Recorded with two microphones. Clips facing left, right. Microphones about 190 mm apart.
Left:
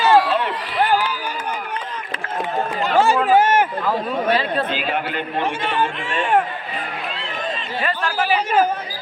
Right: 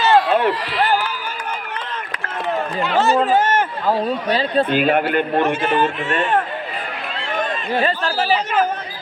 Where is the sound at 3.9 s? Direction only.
30° right (ahead or behind).